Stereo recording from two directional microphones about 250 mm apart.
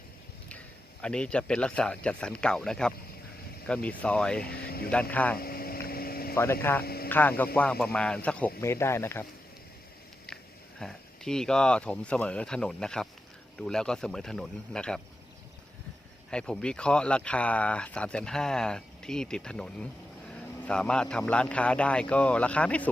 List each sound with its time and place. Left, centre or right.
1.0 s speech: centre
4.4 s speech: left
5.1 s speech: centre
5.4 s vehicle: left
6.3 s speech: centre
6.8 s a sound: left
7.1 s speech: centre
10.3 s sniff: centre
10.8 s speech: centre
16.3 s speech: centre